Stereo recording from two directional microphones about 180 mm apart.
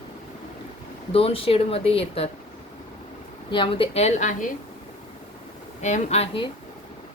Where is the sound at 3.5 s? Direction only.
30° left (ahead or behind).